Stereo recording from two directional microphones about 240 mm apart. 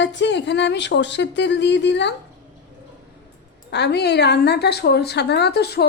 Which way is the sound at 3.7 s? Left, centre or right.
Left.